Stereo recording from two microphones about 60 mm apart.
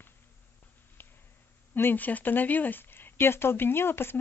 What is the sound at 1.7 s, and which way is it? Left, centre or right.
Speech, left.